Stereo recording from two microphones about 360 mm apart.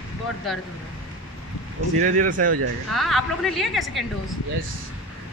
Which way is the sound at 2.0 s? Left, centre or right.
Right.